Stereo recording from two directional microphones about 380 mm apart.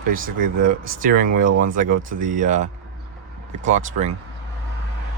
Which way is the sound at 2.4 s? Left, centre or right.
Centre.